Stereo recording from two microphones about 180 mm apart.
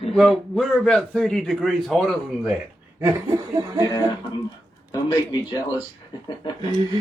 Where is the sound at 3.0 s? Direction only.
20° right (ahead or behind).